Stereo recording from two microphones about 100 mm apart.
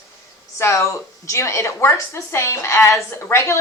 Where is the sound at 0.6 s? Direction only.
30° left (ahead or behind).